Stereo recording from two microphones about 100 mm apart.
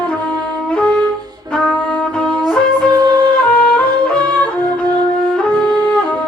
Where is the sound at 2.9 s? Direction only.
40° right (ahead or behind).